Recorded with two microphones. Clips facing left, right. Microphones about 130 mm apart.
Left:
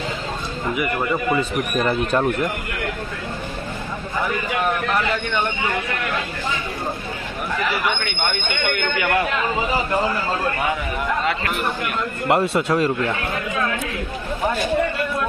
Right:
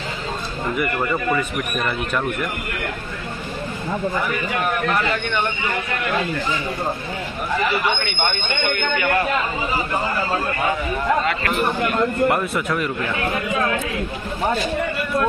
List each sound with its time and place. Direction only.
0.7 s speech: 10° left (ahead or behind)
1.8 s a man's voice: 35° left (ahead or behind)
12.3 s a man's voice: 30° left (ahead or behind)